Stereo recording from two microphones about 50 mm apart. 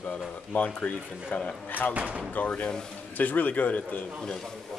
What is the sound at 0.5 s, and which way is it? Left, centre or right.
Speech, left.